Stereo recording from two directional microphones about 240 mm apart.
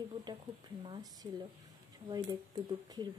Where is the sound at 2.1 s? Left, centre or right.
Centre.